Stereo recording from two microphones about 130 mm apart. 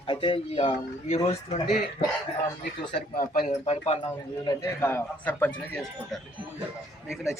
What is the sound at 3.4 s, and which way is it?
Speech, 55° left (ahead or behind).